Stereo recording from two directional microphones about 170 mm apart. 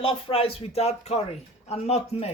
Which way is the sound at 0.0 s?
30° left (ahead or behind).